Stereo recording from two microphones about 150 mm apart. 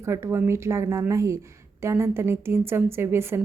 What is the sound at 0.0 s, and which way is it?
A woman's voice, 15° right (ahead or behind).